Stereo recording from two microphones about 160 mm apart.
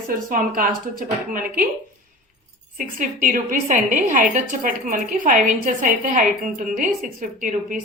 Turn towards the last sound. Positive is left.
turn(degrees=-55)  # may be behind; listen again after turning